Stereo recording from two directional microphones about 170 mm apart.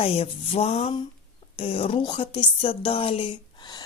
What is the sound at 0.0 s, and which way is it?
A woman's voice, 35° left (ahead or behind).